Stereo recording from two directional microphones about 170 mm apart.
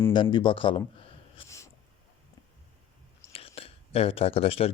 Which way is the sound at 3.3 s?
35° left (ahead or behind).